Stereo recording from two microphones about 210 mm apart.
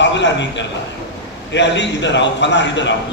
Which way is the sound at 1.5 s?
55° left (ahead or behind).